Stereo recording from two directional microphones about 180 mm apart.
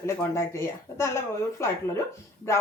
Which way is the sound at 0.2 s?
15° left (ahead or behind).